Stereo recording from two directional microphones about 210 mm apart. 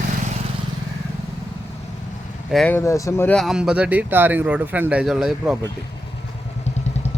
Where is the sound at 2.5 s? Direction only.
5° left (ahead or behind).